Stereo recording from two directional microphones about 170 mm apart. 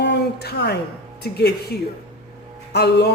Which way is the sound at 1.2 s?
75° left (ahead or behind).